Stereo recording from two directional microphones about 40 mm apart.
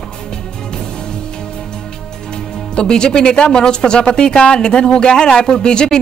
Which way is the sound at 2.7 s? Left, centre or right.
Left.